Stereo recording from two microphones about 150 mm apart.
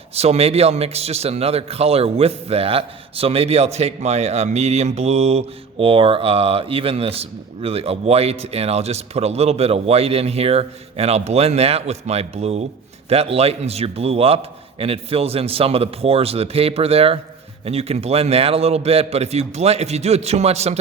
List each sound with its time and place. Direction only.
0.1 s a man's voice: 45° right (ahead or behind)